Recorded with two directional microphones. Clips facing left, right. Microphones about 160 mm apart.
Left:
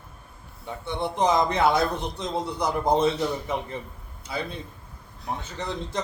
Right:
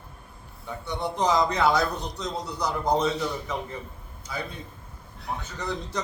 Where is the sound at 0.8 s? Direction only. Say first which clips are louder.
Left 2 dB; 25° left (ahead or behind).